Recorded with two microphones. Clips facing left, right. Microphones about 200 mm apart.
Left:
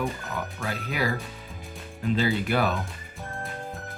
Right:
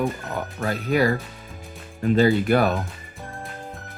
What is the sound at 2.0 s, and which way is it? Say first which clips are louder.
Speech: right 7 dB; 50° right (ahead or behind).